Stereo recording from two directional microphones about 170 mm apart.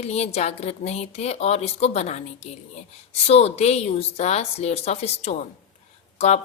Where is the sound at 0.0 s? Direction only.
40° left (ahead or behind).